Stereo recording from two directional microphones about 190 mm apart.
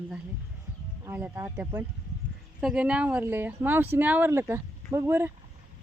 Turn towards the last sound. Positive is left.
turn(degrees=-10)  # may be behind; listen again after turning